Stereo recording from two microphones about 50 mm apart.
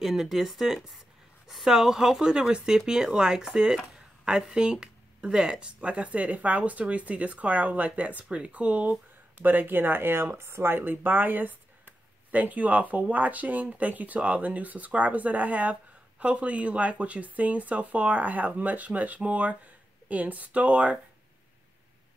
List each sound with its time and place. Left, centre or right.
0.0 s speech: centre; by 8.9 s right
9.4 s speech: right